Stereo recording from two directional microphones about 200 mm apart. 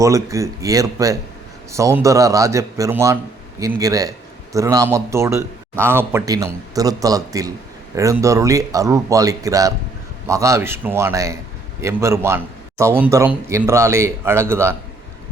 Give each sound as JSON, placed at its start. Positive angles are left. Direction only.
{"t": 0.0, "sound": "speech", "side_deg": -15}